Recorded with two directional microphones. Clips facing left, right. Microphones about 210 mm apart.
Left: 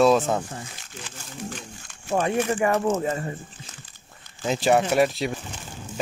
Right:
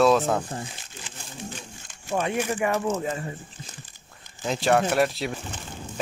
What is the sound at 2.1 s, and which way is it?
Speech, 40° left (ahead or behind).